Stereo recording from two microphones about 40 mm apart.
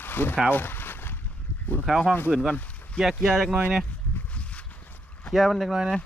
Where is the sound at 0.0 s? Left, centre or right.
Left.